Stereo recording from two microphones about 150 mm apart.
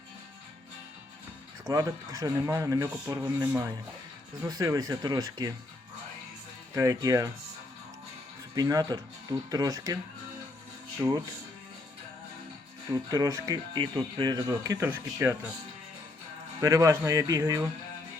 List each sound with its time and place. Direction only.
1.6 s speech: 20° right (ahead or behind)
6.7 s speech: 20° right (ahead or behind)
8.5 s speech: 25° right (ahead or behind)
11.0 s speech: 25° right (ahead or behind)
12.9 s speech: 20° right (ahead or behind)
16.6 s speech: 20° right (ahead or behind)